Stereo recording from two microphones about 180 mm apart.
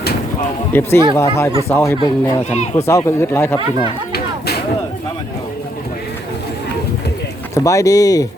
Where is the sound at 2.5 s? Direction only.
35° left (ahead or behind).